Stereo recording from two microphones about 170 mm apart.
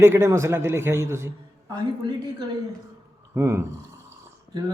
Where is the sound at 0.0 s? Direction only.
15° right (ahead or behind).